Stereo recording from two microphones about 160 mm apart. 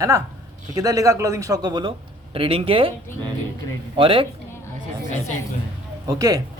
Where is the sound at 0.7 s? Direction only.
20° right (ahead or behind).